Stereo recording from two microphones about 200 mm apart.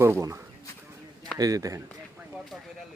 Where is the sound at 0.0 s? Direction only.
15° right (ahead or behind).